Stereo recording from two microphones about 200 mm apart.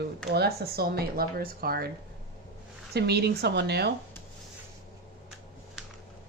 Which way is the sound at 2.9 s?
55° right (ahead or behind).